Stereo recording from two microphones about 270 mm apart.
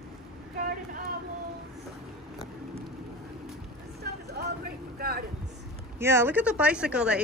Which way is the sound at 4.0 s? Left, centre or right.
Right.